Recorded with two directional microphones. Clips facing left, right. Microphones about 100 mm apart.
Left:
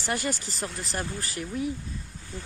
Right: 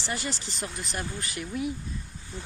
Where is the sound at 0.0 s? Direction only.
50° left (ahead or behind).